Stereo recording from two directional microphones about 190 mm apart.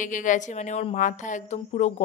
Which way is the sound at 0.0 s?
45° left (ahead or behind).